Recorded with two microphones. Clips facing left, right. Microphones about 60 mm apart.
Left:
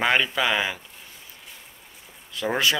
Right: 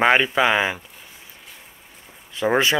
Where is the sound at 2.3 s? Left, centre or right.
Right.